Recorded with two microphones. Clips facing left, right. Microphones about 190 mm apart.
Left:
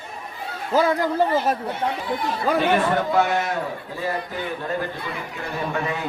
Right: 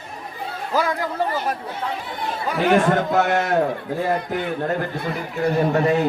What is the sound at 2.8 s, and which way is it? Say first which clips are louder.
A man's voice: right 2 dB; 50° right (ahead or behind).